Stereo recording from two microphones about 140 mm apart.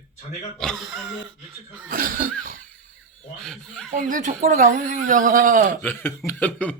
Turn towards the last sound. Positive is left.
turn(degrees=10)  # may be behind; listen again after turning